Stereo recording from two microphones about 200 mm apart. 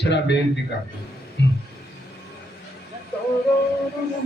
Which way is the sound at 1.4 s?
65° left (ahead or behind).